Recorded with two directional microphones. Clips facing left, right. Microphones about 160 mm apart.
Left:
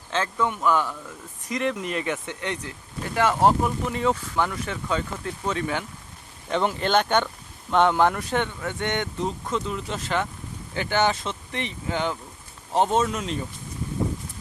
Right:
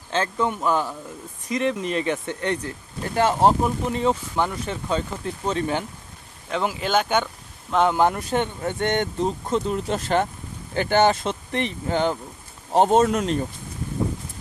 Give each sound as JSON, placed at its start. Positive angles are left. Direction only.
{"t": 0.5, "sound": "speech", "side_deg": -35}
{"t": 3.2, "sound": "speech", "side_deg": -30}
{"t": 6.5, "sound": "speech", "side_deg": -5}
{"t": 8.4, "sound": "speech", "side_deg": -40}